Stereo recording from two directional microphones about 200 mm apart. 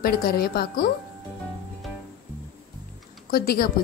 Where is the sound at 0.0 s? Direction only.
50° left (ahead or behind).